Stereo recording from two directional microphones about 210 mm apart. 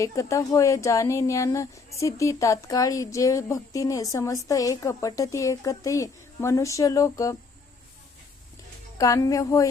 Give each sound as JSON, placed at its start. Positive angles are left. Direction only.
{"t": 0.0, "sound": "speech", "side_deg": 15}
{"t": 9.0, "sound": "speech", "side_deg": 15}